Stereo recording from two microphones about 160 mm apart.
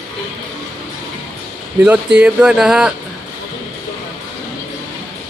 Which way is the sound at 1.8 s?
10° right (ahead or behind).